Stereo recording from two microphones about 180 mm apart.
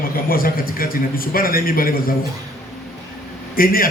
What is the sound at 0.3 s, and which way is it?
A man's voice, 55° left (ahead or behind).